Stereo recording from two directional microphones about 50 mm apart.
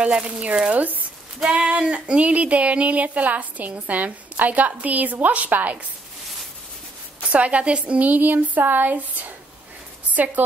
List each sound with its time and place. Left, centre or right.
0.0 s speech: right
0.7 s speech: right
1.5 s speech: right
7.3 s a woman's voice: right